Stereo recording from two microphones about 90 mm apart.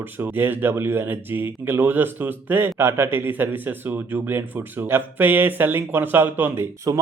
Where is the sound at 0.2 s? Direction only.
25° right (ahead or behind).